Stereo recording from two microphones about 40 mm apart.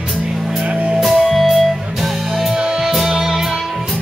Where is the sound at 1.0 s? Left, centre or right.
Centre.